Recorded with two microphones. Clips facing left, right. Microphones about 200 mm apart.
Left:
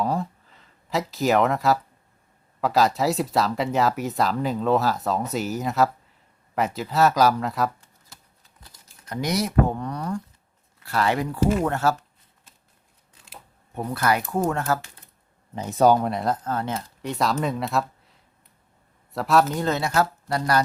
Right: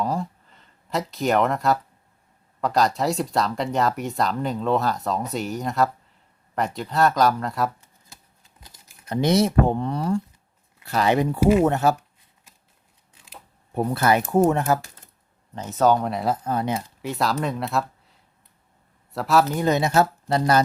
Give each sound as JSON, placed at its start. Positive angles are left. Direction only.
{"t": 0.0, "sound": "a sound", "side_deg": 0}
{"t": 2.6, "sound": "speech", "side_deg": 5}
{"t": 8.6, "sound": "speech", "side_deg": -25}
{"t": 13.7, "sound": "speech", "side_deg": -25}
{"t": 15.5, "sound": "speech", "side_deg": 15}
{"t": 19.6, "sound": "speech", "side_deg": -20}